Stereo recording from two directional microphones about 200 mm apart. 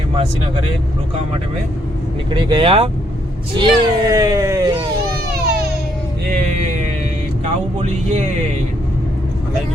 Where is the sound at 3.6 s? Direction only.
20° right (ahead or behind).